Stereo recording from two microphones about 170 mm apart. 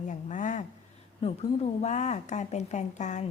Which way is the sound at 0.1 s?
45° left (ahead or behind).